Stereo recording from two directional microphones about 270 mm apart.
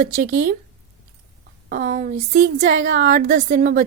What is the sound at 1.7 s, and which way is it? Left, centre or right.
A woman's voice, right.